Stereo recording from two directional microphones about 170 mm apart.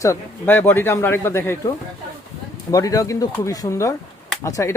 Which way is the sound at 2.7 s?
20° left (ahead or behind).